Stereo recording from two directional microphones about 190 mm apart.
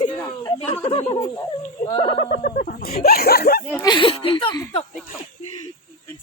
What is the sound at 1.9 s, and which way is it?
Speech, 30° left (ahead or behind).